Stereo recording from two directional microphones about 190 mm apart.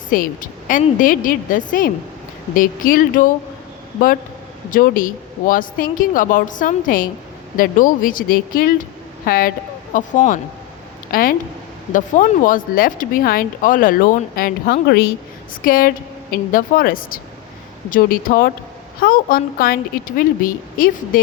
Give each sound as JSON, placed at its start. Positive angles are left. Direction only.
{"t": 0.1, "sound": "speech", "side_deg": 45}
{"t": 4.7, "sound": "speech", "side_deg": 45}